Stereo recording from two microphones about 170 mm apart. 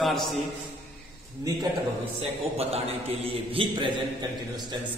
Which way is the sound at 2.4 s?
35° right (ahead or behind).